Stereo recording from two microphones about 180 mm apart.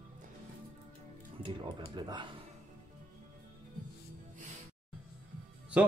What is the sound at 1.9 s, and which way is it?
Speech, 25° right (ahead or behind).